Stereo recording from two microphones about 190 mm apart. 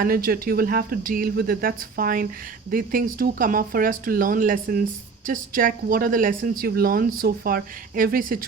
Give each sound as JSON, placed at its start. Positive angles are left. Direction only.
{"t": 0.0, "sound": "speech", "side_deg": -50}